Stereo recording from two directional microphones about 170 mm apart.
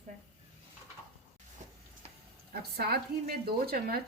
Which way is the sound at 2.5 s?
65° right (ahead or behind).